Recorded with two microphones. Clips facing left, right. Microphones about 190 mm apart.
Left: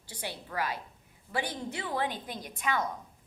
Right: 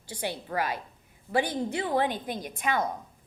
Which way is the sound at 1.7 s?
45° right (ahead or behind).